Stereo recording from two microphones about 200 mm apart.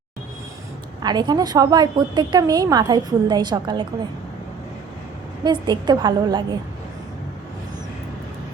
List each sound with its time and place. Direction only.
1.0 s a woman's voice: 20° right (ahead or behind)
5.4 s a woman's voice: 20° right (ahead or behind)